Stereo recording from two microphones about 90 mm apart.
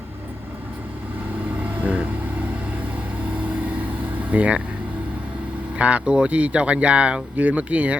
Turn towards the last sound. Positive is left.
turn(degrees=-15)  # may be behind; listen again after turning